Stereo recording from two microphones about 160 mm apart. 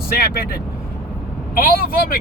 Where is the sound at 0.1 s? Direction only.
75° left (ahead or behind).